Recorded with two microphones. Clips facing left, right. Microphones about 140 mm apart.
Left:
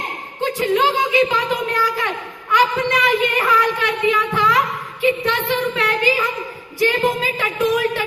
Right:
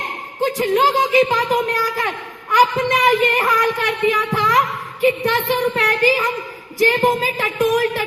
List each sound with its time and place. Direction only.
0.4 s a woman's voice: 40° right (ahead or behind)